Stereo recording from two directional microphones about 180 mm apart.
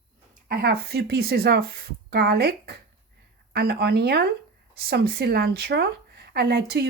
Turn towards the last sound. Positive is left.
turn(degrees=-60)  # may be behind; listen again after turning